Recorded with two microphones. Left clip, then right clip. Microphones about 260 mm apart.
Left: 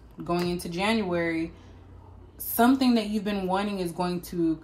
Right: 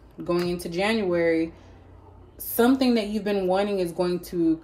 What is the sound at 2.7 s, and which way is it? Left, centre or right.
Speech, left.